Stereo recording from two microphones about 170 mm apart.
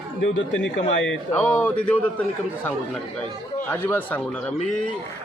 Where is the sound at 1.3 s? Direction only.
10° left (ahead or behind).